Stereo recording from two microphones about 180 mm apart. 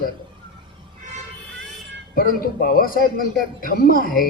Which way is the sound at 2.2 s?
55° left (ahead or behind).